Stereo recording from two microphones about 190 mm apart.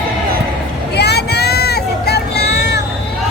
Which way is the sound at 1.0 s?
60° left (ahead or behind).